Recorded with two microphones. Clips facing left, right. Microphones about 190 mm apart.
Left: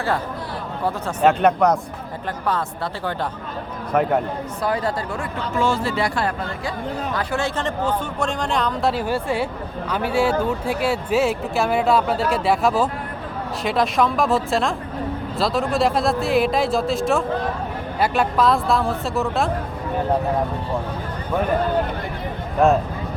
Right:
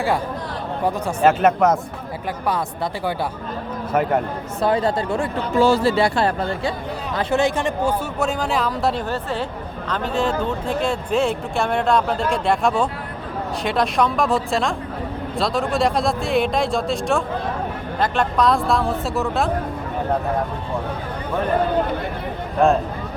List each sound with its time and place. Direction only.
1.2 s speech: centre (ahead or behind)
3.9 s speech: centre (ahead or behind)
4.6 s speech: 25° right (ahead or behind); by 19.5 s centre (ahead or behind)